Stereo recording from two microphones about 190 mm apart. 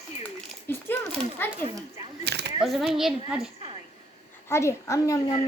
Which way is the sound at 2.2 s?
60° right (ahead or behind).